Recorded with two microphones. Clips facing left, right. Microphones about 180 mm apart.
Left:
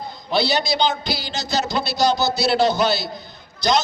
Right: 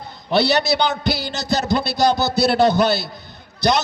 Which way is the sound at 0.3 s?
65° right (ahead or behind).